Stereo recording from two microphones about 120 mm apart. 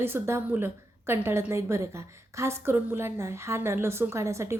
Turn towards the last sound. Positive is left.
turn(degrees=-25)  # may be behind; listen again after turning